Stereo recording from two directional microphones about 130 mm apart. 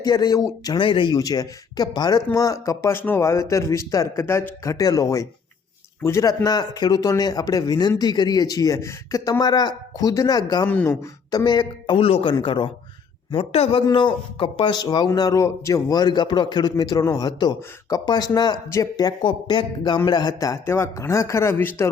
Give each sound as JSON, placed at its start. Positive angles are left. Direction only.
{"t": 0.0, "sound": "speech", "side_deg": 30}
{"t": 10.7, "sound": "speech", "side_deg": 15}
{"t": 11.3, "sound": "a man's voice", "side_deg": 30}
{"t": 13.8, "sound": "speech", "side_deg": 35}